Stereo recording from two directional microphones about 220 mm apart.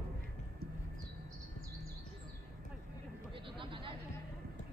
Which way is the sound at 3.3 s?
20° right (ahead or behind).